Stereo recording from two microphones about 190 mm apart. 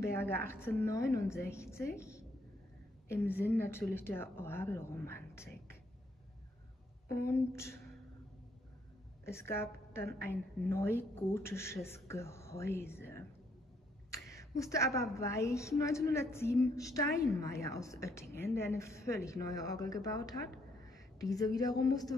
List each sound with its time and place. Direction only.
0.0 s a woman's voice: 10° left (ahead or behind)
7.1 s a woman's voice: 15° left (ahead or behind)
9.2 s a woman's voice: 15° left (ahead or behind)
14.3 s a woman's voice: 15° left (ahead or behind)